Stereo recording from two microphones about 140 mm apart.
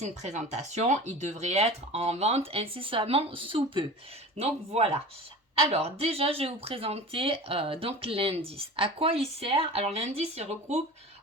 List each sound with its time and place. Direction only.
0.0 s speech: 55° right (ahead or behind)